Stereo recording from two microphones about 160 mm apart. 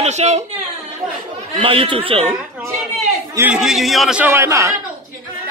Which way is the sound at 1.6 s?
35° right (ahead or behind).